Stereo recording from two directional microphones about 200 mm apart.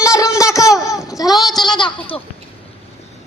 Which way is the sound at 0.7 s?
Centre (ahead or behind).